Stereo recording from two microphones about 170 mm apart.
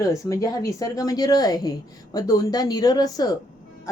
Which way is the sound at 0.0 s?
20° left (ahead or behind).